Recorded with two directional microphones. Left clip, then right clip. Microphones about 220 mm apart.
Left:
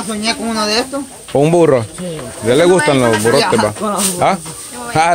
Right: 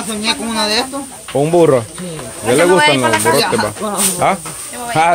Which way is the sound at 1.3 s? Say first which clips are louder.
Even; 30° left (ahead or behind).